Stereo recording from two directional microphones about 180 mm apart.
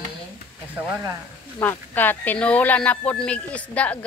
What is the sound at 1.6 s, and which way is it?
Speech, 10° left (ahead or behind).